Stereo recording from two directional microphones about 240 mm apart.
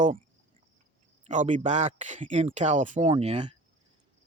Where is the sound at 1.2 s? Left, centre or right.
Right.